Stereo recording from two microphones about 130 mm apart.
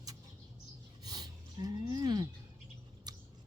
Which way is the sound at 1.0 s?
30° right (ahead or behind).